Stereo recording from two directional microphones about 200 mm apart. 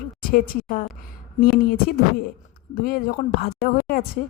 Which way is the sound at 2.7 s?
45° left (ahead or behind).